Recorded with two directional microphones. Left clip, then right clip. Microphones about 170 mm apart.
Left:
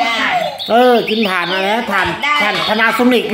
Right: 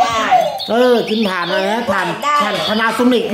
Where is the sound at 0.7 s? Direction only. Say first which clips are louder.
Left 4 dB; 5° right (ahead or behind).